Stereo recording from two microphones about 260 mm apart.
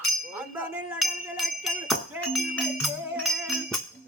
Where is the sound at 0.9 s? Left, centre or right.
Centre.